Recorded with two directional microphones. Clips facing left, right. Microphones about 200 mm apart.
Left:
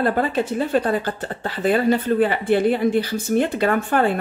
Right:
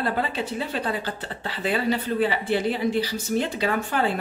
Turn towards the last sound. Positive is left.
turn(degrees=55)  # may be behind; listen again after turning